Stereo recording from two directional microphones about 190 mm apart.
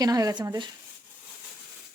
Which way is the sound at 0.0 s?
20° right (ahead or behind).